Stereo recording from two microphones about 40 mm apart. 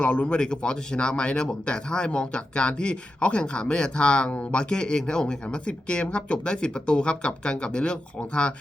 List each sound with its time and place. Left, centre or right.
0.0 s speech: left
0.3 s speech: centre